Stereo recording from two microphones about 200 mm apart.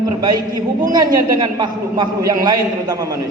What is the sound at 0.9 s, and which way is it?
A man's voice, 20° right (ahead or behind).